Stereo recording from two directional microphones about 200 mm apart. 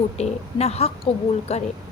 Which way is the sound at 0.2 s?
30° left (ahead or behind).